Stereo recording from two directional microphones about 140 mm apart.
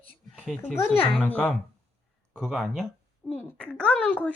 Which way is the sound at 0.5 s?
15° left (ahead or behind).